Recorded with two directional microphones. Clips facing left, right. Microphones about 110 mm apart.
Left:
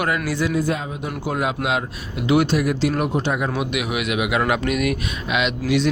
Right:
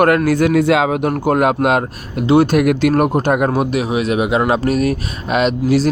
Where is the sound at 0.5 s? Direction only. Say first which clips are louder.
Right 10 dB; 80° right; by 2.2 s 50° right (ahead or behind).